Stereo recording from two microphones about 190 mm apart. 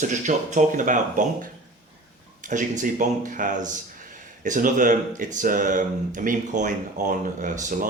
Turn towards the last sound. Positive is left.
turn(degrees=-45)  # may be behind; listen again after turning